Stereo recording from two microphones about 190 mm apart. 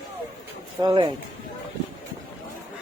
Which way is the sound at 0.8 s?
25° right (ahead or behind).